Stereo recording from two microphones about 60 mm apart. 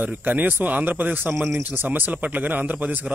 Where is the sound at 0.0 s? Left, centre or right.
Right.